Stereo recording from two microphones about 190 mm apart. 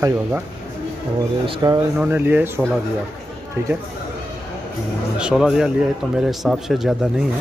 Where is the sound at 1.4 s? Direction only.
20° right (ahead or behind).